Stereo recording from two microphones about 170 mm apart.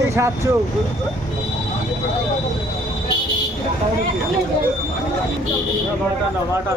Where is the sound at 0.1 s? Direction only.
15° right (ahead or behind).